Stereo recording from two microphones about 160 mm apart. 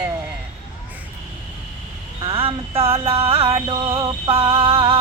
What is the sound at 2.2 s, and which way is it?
Music, 35° right (ahead or behind).